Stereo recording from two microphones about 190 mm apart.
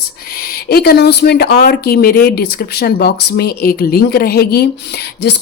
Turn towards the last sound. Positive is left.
turn(degrees=60)  # may be behind; listen again after turning